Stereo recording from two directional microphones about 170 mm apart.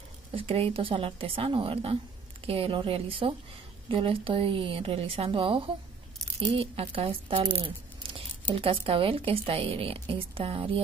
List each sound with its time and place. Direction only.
0.3 s a woman's voice: 30° right (ahead or behind)